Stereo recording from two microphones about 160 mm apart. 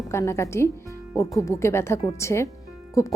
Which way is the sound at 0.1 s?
15° left (ahead or behind).